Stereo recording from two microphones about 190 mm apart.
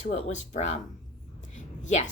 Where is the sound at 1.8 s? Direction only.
40° left (ahead or behind).